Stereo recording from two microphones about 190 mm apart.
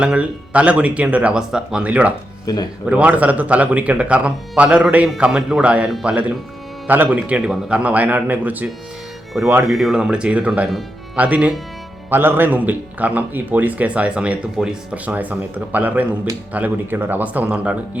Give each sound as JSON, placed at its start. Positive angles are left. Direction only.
{"t": 0.0, "sound": "speech", "side_deg": -5}
{"t": 2.5, "sound": "speech", "side_deg": 20}
{"t": 2.8, "sound": "speech", "side_deg": -5}